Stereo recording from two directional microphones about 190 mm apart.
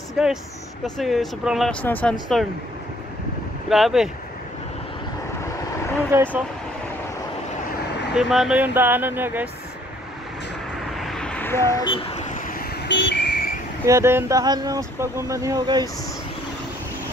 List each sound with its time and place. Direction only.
0.2 s speech: 5° right (ahead or behind)
3.6 s speech: centre (ahead or behind)
6.1 s speech: 15° right (ahead or behind)
8.1 s speech: centre (ahead or behind)
11.0 s vehicle: centre (ahead or behind); by 12.6 s 45° left (ahead or behind)
12.8 s vehicle: 65° left (ahead or behind)
13.8 s speech: 15° right (ahead or behind)